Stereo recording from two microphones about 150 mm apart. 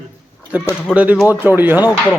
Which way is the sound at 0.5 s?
10° right (ahead or behind).